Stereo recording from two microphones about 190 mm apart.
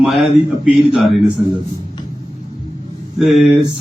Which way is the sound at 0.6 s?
Centre (ahead or behind).